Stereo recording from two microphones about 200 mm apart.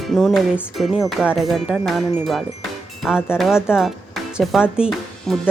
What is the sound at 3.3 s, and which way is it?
Speech, centre (ahead or behind).